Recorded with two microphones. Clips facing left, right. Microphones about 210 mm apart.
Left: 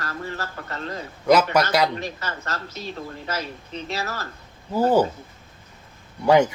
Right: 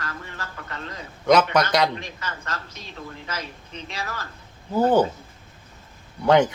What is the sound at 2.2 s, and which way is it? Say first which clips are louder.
Speech: left 2 dB; 35° left (ahead or behind).